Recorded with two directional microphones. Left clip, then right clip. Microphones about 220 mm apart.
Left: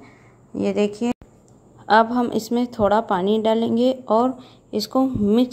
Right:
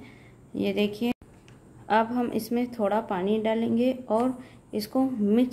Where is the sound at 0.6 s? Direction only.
15° left (ahead or behind).